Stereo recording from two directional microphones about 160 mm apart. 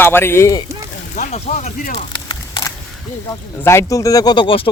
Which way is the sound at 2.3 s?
25° left (ahead or behind).